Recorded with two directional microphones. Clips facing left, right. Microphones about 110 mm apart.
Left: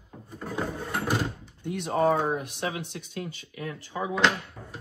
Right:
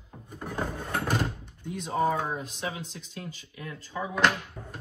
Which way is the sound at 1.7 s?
65° left (ahead or behind).